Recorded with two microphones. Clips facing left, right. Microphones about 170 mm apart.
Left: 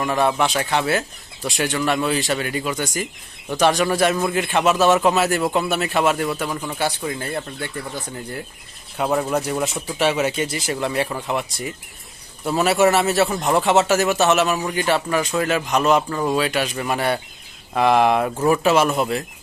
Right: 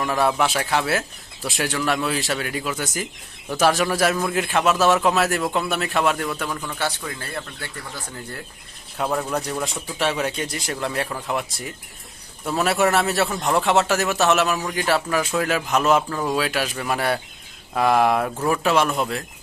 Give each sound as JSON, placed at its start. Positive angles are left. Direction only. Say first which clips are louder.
{"t": 0.0, "sound": "speech", "louder": "left 1 dB", "side_deg": 0}
{"t": 9.0, "sound": "speech", "louder": "left 3 dB", "side_deg": 5}